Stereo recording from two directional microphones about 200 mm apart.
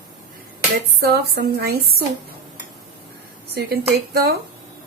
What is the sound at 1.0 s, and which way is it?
A woman's voice, 50° right (ahead or behind).